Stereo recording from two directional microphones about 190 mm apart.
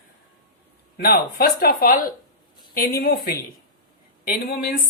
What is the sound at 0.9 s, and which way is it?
Speech, 50° left (ahead or behind).